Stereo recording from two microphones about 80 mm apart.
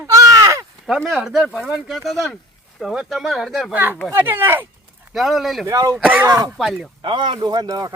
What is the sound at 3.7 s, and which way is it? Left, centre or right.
Speech, right.